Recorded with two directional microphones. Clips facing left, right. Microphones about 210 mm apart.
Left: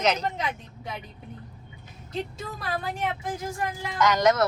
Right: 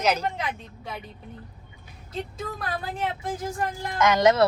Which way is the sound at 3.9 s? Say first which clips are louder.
Right 2 dB; 25° right (ahead or behind).